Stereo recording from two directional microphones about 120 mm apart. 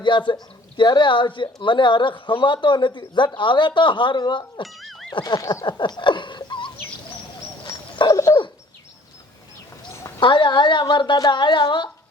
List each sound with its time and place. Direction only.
0.0 s speech: 40° left (ahead or behind)
4.6 s boing: centre (ahead or behind)
5.1 s speech: 35° left (ahead or behind)
6.0 s laughter: 40° left (ahead or behind)
7.9 s dog: 30° left (ahead or behind)
10.2 s speech: 40° left (ahead or behind)